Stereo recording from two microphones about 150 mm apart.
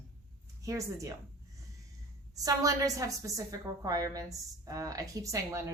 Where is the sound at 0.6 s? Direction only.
20° right (ahead or behind).